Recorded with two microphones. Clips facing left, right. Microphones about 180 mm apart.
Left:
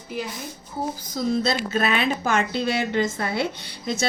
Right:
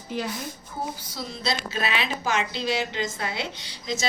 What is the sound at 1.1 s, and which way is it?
A woman's voice, 50° left (ahead or behind).